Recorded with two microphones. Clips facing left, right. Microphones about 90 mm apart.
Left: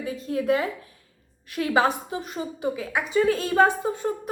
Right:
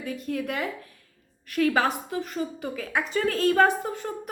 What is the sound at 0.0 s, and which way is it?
A woman's voice, 25° left (ahead or behind).